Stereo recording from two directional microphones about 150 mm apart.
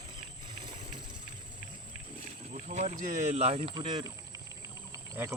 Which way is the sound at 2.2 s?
50° right (ahead or behind).